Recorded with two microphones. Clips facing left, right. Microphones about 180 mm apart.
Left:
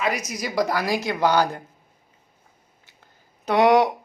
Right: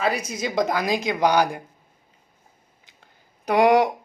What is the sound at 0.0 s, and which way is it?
Speech, 30° right (ahead or behind).